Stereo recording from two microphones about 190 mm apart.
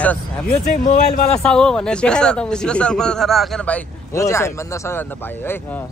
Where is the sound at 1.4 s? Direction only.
5° left (ahead or behind).